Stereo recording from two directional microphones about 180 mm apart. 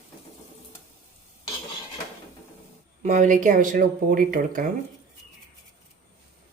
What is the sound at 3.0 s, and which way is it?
Speech, 45° right (ahead or behind).